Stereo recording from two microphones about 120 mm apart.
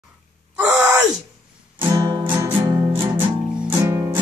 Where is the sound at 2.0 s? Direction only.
30° right (ahead or behind).